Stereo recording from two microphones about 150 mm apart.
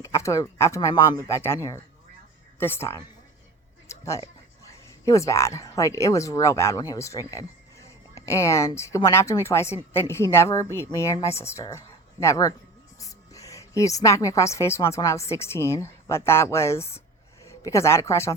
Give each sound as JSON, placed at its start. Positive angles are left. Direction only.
{"t": 0.0, "sound": "a woman's voice", "side_deg": 20}
{"t": 2.6, "sound": "speech", "side_deg": 15}
{"t": 3.8, "sound": "a sound", "side_deg": 20}
{"t": 4.6, "sound": "a woman's voice", "side_deg": 20}